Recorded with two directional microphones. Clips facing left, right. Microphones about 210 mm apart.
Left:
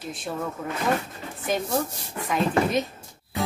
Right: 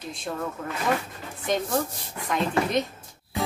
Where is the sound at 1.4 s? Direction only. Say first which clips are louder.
Even; 5° left (ahead or behind).